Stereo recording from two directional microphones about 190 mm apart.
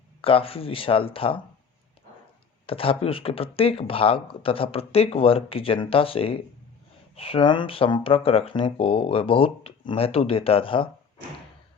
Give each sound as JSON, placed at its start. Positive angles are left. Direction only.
{"t": 0.2, "sound": "speech", "side_deg": 30}
{"t": 2.6, "sound": "speech", "side_deg": 30}